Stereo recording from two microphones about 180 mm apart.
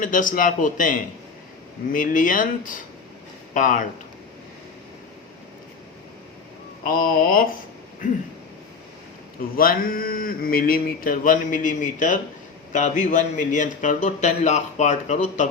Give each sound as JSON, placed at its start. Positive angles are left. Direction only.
{"t": 0.0, "sound": "a man's voice", "side_deg": 50}
{"t": 6.8, "sound": "a man's voice", "side_deg": 50}
{"t": 9.6, "sound": "a man's voice", "side_deg": 55}